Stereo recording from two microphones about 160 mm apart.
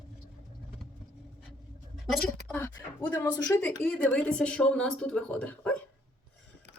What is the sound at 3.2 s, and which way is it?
Speech, 10° left (ahead or behind).